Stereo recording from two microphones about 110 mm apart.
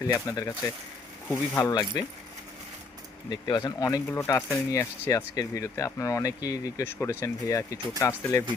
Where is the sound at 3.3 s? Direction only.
40° left (ahead or behind).